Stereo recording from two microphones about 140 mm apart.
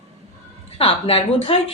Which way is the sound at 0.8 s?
45° left (ahead or behind).